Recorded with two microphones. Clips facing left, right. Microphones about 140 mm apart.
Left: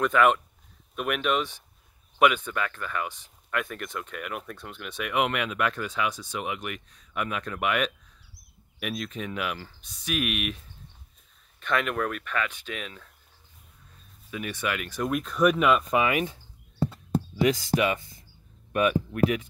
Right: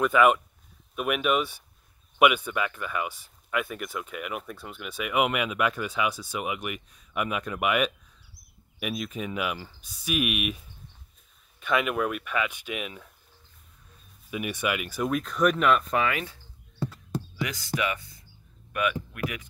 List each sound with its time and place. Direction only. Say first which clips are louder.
0.0 s speech: right 1 dB; 5° right (ahead or behind)
11.6 s speech: right 1 dB; 5° right (ahead or behind)
14.3 s speech: right 2 dB; 10° right (ahead or behind); by 16.3 s 20° left (ahead or behind)
16.8 s a sound: left 5 dB; 25° left (ahead or behind)
18.7 s speech: left 5 dB; 30° left (ahead or behind)